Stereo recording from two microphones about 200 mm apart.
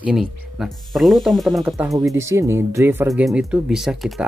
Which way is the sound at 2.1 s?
15° right (ahead or behind).